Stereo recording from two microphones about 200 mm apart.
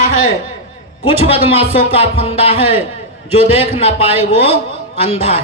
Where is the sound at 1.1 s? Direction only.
30° left (ahead or behind).